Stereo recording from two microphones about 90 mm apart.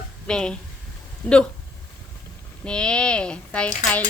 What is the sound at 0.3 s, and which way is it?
Speech, 10° left (ahead or behind).